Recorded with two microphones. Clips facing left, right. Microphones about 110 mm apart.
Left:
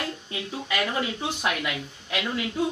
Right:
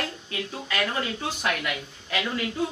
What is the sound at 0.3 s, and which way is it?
Speech, 10° left (ahead or behind).